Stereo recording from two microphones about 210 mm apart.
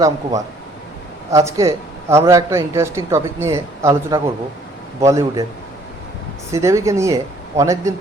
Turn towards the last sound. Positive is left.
turn(degrees=-15)  # may be behind; listen again after turning